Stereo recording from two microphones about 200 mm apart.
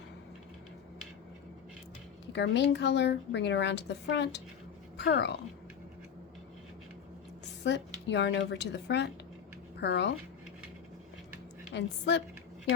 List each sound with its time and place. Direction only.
2.3 s a woman's voice: 60° left (ahead or behind)
7.6 s a woman's voice: 60° left (ahead or behind)
11.7 s a woman's voice: 60° left (ahead or behind)